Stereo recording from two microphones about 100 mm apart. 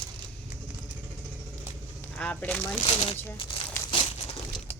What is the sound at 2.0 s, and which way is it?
Speech, 15° left (ahead or behind).